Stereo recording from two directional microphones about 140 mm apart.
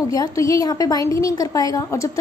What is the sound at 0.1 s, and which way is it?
A woman's voice, 25° left (ahead or behind).